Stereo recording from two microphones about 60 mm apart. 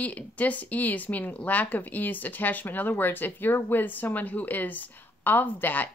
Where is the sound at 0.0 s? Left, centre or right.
Left.